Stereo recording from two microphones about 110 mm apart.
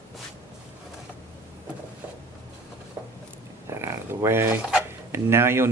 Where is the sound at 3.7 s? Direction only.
25° right (ahead or behind).